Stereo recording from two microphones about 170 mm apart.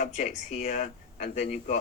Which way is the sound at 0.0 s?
45° left (ahead or behind).